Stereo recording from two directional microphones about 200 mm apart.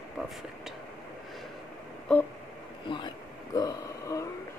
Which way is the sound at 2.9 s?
25° left (ahead or behind).